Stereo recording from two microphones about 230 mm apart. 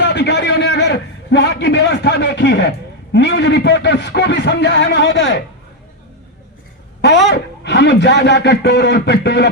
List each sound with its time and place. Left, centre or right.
0.0 s a man's voice: left
7.3 s speech: left